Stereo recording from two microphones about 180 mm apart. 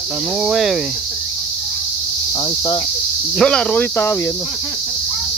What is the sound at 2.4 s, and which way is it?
Cricket, 25° left (ahead or behind).